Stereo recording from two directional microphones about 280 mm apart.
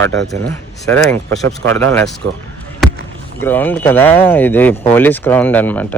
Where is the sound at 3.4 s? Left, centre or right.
Centre.